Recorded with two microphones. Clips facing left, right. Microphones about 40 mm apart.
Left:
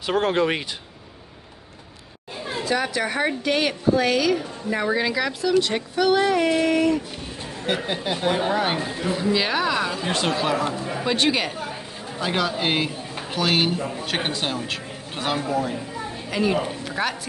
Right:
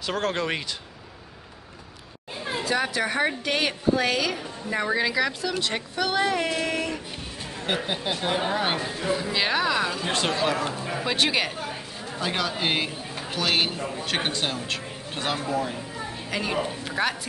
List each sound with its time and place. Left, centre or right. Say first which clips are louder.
0.0 s speech: left 6 dB; centre
2.6 s speech: left 2 dB; centre